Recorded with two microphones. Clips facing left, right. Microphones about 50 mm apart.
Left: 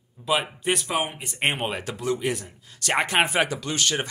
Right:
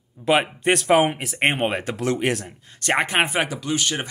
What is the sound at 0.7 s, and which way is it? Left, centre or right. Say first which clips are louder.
Speech: right 8 dB; right.